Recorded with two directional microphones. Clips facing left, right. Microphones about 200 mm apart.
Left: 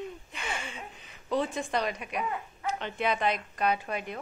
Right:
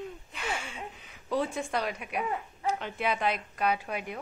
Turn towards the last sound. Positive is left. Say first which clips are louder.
# left 1 dB
turn(degrees=-10)  # may be behind; listen again after turning